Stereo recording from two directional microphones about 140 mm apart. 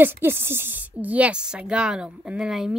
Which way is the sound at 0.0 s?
15° right (ahead or behind).